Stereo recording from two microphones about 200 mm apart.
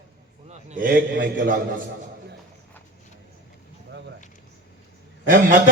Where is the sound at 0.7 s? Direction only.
45° right (ahead or behind).